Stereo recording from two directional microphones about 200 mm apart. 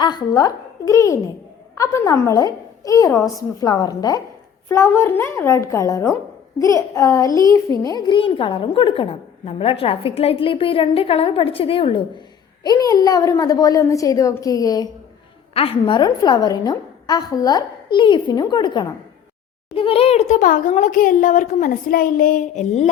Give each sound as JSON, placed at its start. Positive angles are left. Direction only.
{"t": 0.0, "sound": "a child's voice", "side_deg": 20}